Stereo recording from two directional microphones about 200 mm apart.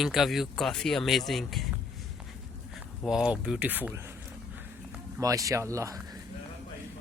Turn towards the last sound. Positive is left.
turn(degrees=-15)  # may be behind; listen again after turning